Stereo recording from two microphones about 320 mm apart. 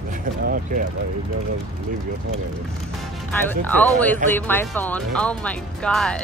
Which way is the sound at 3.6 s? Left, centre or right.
Centre.